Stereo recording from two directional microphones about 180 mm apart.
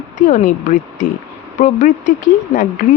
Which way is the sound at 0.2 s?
45° left (ahead or behind).